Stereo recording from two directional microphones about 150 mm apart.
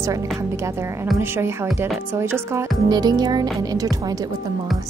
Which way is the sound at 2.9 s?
25° right (ahead or behind).